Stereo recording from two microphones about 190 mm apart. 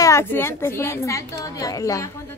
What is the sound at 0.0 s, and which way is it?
A woman's voice, 15° left (ahead or behind).